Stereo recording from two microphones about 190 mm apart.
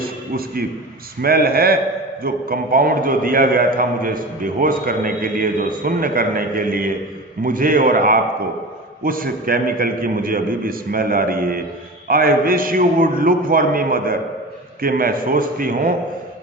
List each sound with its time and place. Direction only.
0.0 s music: 50° right (ahead or behind)
1.2 s a man's voice: 50° right (ahead or behind)